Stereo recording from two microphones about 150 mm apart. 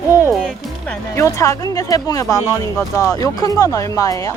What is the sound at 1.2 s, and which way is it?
Speech, 20° left (ahead or behind).